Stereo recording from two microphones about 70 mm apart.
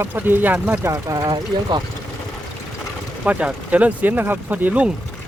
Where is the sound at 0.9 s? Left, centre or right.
Right.